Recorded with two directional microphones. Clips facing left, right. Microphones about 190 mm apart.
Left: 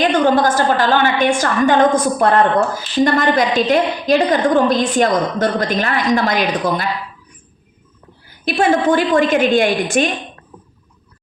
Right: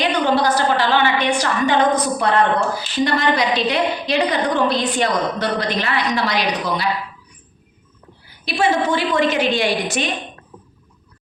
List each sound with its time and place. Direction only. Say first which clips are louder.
0.0 s a woman's voice: left 4 dB; 50° left (ahead or behind)
8.4 s a woman's voice: left 4 dB; 50° left (ahead or behind)